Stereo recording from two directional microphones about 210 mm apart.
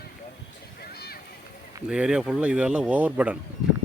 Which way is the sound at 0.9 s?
50° left (ahead or behind).